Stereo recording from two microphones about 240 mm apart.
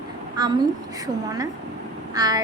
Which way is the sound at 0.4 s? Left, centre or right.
Centre.